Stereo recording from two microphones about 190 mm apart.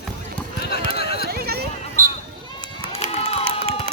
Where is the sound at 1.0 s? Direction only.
55° left (ahead or behind).